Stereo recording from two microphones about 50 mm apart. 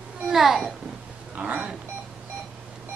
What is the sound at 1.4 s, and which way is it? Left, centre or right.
Speech, right.